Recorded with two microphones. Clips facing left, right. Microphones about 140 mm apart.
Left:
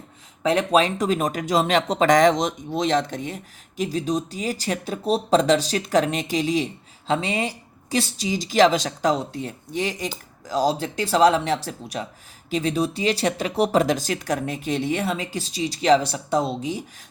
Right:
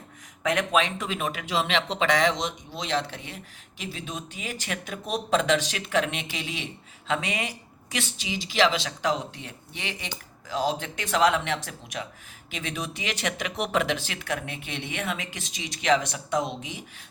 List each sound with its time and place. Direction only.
0.4 s speech: 35° left (ahead or behind)